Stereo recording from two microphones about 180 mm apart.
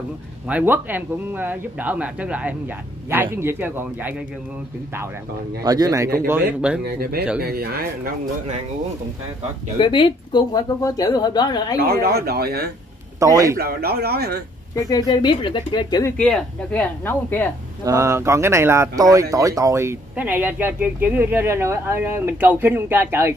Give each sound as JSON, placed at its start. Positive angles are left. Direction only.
{"t": 0.5, "sound": "speech", "side_deg": -10}
{"t": 5.6, "sound": "speech", "side_deg": -20}
{"t": 6.8, "sound": "a man's voice", "side_deg": -60}
{"t": 9.8, "sound": "speech", "side_deg": 30}
{"t": 11.8, "sound": "a man's voice", "side_deg": -60}
{"t": 13.2, "sound": "a man's voice", "side_deg": -20}
{"t": 13.6, "sound": "a man's voice", "side_deg": -60}
{"t": 14.8, "sound": "speech", "side_deg": 20}
{"t": 16.2, "sound": "speech", "side_deg": 5}
{"t": 17.8, "sound": "speech", "side_deg": -15}